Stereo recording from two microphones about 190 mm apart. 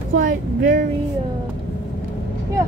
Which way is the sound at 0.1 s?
45° right (ahead or behind).